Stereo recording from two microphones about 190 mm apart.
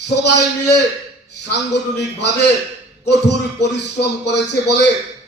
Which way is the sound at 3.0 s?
65° left (ahead or behind).